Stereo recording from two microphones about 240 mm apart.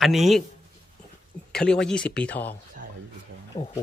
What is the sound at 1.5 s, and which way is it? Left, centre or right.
Speech, centre.